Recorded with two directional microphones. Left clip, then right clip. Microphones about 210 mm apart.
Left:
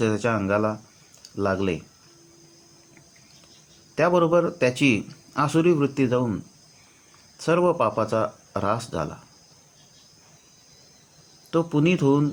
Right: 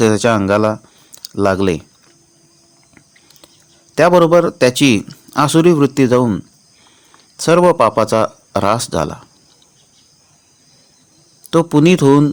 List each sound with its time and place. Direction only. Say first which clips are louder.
0.0 s speech: right 11 dB; 45° right (ahead or behind)
3.9 s a man's voice: right 10 dB; 40° right (ahead or behind)
11.5 s speech: right 10 dB; 45° right (ahead or behind)